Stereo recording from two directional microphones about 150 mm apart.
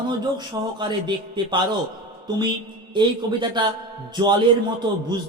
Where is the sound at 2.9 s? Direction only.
30° right (ahead or behind).